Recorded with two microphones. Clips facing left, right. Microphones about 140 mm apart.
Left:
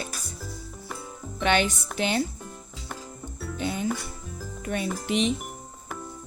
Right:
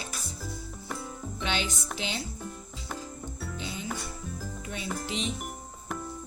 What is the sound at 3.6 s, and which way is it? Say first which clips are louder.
Music: left 11 dB; 55° left (ahead or behind).